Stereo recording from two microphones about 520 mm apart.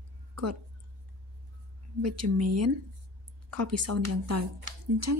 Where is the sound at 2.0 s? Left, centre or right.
Right.